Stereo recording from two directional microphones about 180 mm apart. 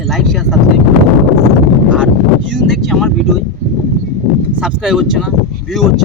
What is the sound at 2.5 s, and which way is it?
Speech, centre (ahead or behind).